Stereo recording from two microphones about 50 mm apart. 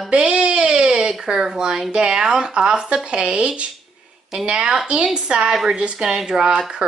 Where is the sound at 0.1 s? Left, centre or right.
Centre.